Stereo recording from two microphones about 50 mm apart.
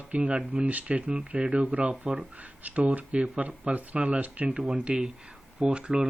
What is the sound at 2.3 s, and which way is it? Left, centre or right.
Speech, right.